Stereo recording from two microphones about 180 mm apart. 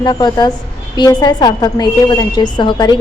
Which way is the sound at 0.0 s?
25° left (ahead or behind).